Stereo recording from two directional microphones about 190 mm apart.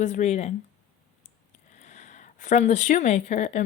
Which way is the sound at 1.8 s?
40° left (ahead or behind).